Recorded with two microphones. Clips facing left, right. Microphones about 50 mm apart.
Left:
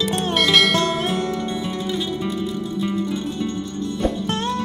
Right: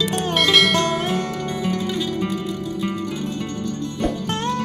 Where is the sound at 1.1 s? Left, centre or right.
Right.